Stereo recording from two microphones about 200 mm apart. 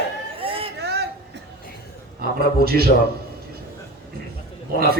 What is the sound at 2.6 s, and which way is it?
Speech, 50° right (ahead or behind).